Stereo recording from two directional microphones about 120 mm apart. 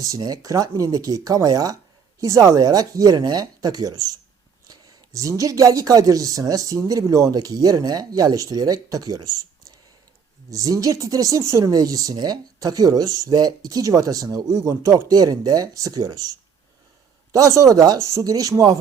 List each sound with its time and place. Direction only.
0.0 s speech: 30° right (ahead or behind)
10.5 s speech: 30° right (ahead or behind)
17.3 s speech: 30° right (ahead or behind)